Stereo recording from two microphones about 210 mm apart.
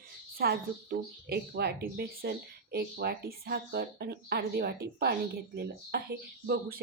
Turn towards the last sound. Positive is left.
turn(degrees=-50)  # may be behind; listen again after turning